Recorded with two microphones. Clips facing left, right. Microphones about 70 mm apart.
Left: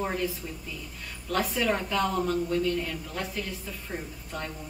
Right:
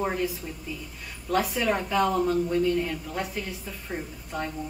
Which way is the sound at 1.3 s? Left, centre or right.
Centre.